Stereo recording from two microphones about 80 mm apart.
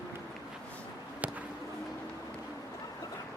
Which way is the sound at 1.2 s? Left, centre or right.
Centre.